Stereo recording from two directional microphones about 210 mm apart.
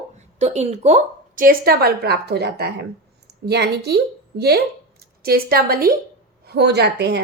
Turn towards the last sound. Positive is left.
turn(degrees=-55)  # may be behind; listen again after turning